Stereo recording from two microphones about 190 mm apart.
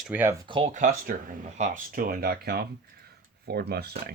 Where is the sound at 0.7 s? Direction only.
45° right (ahead or behind).